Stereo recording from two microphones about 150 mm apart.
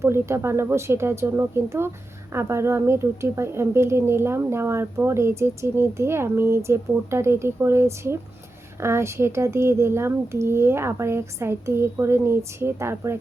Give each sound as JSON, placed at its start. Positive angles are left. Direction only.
{"t": 0.0, "sound": "speech", "side_deg": -15}